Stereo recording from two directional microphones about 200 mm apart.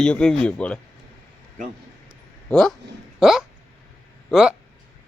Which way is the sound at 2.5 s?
Centre (ahead or behind).